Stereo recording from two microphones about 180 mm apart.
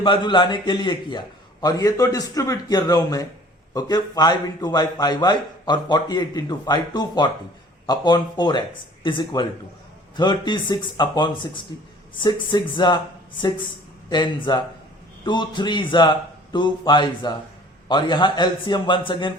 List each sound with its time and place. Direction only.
0.0 s a man's voice: 25° left (ahead or behind)
14.1 s a man's voice: 25° left (ahead or behind)